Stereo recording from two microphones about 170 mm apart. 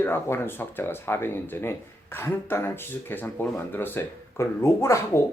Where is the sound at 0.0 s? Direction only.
15° left (ahead or behind).